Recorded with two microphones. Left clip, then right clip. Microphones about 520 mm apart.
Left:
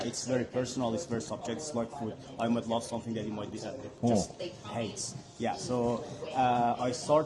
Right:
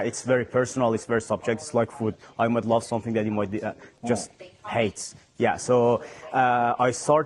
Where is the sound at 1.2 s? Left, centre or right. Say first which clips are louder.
Right 10 dB; right.